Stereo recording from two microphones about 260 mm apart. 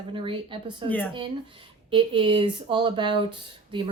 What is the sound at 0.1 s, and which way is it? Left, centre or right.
Speech, centre.